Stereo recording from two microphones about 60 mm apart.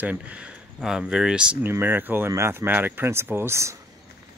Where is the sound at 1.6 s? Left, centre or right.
Right.